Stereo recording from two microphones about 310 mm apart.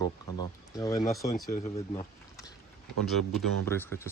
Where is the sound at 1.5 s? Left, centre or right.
Left.